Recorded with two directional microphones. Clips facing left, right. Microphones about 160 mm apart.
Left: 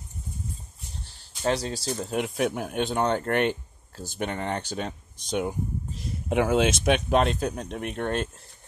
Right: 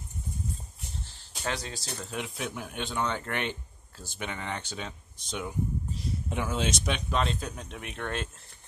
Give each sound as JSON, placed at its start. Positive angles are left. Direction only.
{"t": 1.4, "sound": "speech", "side_deg": 35}
{"t": 2.0, "sound": "speech", "side_deg": 55}
{"t": 6.2, "sound": "speech", "side_deg": 65}